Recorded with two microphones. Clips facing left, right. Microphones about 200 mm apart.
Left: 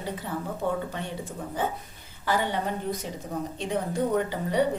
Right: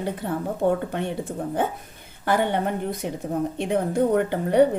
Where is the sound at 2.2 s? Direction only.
55° right (ahead or behind).